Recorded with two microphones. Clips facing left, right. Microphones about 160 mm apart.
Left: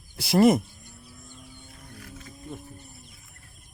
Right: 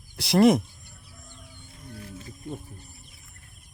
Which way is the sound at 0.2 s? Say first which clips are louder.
Even; centre (ahead or behind).